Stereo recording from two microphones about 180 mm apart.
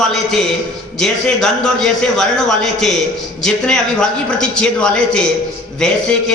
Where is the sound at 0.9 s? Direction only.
5° left (ahead or behind).